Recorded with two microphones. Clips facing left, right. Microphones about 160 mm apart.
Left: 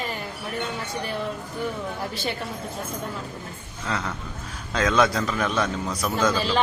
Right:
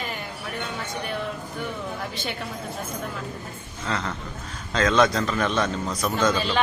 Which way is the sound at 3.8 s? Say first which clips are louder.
Even; 10° left (ahead or behind).